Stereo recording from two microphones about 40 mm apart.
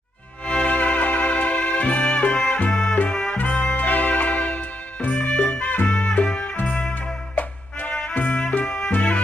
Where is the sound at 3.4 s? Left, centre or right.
Left.